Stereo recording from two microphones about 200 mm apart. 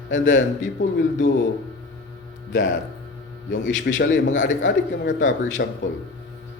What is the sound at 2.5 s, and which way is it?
Speech, 75° left (ahead or behind).